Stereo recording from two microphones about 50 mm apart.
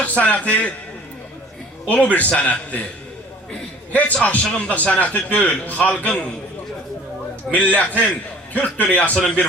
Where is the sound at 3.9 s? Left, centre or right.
Left.